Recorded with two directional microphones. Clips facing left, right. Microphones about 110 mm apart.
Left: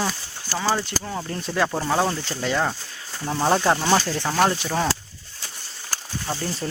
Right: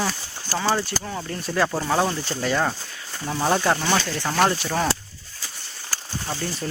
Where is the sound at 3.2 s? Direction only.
10° left (ahead or behind).